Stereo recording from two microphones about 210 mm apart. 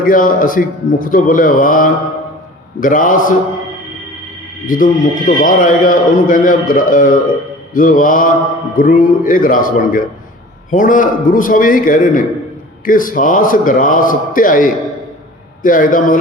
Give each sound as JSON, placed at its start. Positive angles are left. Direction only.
{"t": 0.0, "sound": "a man's voice", "side_deg": 40}
{"t": 4.6, "sound": "a man's voice", "side_deg": 40}